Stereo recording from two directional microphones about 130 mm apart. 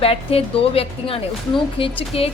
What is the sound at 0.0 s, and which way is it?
A woman's voice, 45° left (ahead or behind).